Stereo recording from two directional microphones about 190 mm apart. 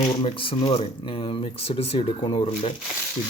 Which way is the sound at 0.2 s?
30° left (ahead or behind).